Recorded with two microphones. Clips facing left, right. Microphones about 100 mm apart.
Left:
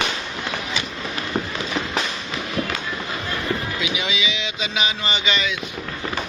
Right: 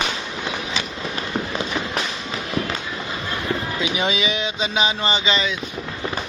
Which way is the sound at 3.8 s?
40° right (ahead or behind).